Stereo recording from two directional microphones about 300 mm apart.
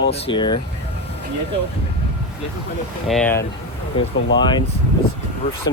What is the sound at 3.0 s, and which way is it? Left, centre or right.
Speech, centre.